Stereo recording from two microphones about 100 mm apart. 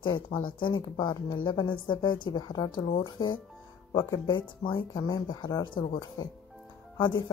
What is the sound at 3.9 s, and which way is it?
Speech, 40° left (ahead or behind).